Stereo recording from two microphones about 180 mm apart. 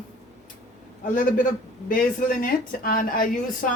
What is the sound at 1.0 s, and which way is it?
A woman's voice, 45° left (ahead or behind).